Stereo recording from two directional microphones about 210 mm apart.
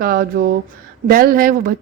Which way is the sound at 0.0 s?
45° right (ahead or behind).